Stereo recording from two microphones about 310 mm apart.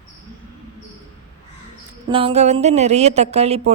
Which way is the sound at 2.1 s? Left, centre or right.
Centre.